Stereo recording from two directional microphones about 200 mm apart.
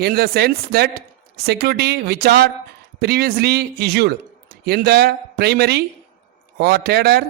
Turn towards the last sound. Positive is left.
turn(degrees=-50)  # may be behind; listen again after turning